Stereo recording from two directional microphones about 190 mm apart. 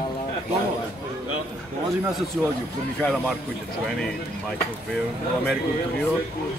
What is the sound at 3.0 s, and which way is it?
Speech, 5° left (ahead or behind).